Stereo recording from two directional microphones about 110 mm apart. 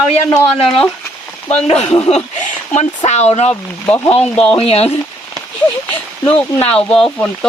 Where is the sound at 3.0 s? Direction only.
90° left.